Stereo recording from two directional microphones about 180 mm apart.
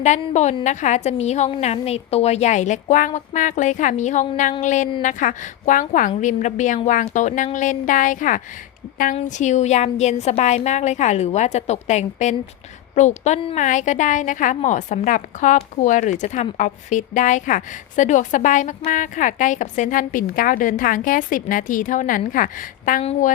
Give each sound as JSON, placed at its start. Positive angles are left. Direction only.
{"t": 0.0, "sound": "a woman's voice", "side_deg": 40}